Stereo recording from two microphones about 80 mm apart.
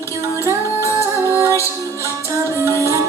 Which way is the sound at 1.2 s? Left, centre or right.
Right.